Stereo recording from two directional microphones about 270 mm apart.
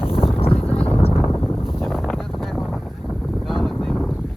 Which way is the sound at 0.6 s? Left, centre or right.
Centre.